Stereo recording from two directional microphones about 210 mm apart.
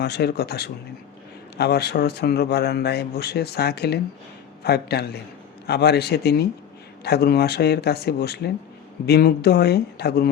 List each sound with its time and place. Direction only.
0.0 s a man's voice: 50° left (ahead or behind)